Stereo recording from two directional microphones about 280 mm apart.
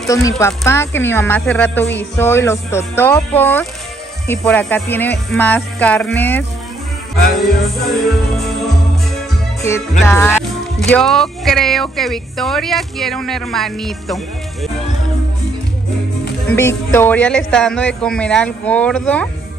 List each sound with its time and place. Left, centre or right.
0.1 s speech: centre
7.8 s speech: centre
9.6 s speech: centre
16.4 s speech: centre